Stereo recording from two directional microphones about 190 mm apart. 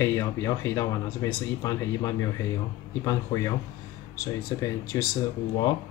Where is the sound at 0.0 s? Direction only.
15° left (ahead or behind).